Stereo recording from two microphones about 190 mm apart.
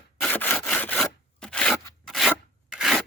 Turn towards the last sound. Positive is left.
turn(degrees=0)  # may be behind; listen again after turning